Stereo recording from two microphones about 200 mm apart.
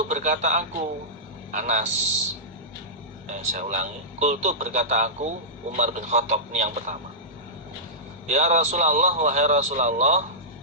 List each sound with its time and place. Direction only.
0.1 s a man's voice: 35° right (ahead or behind)
3.2 s speech: 35° right (ahead or behind)
8.3 s speech: 35° right (ahead or behind)